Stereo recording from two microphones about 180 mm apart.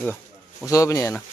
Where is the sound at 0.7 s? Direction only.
20° left (ahead or behind).